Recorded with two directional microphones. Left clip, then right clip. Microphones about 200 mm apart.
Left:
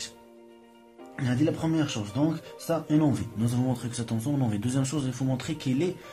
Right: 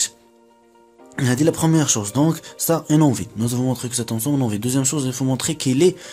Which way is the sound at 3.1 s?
30° right (ahead or behind).